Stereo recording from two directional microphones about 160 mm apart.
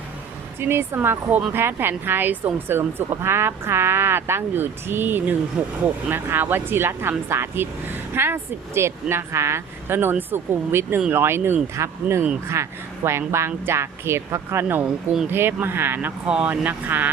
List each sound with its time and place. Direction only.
0.6 s a woman's voice: 15° right (ahead or behind)